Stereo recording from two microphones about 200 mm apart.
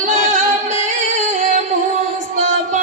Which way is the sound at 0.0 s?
35° right (ahead or behind).